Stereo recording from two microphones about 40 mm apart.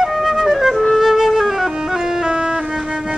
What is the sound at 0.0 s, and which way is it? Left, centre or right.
Flute, centre.